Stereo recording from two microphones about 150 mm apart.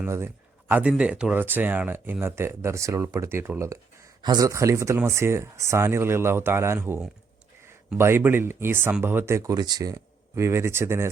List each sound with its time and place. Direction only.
0.0 s speech: 15° right (ahead or behind)